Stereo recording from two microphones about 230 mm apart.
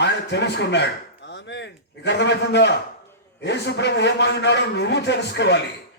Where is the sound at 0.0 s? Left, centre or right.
Left.